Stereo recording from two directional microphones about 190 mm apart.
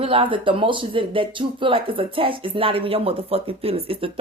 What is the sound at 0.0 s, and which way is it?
Speech, 30° right (ahead or behind).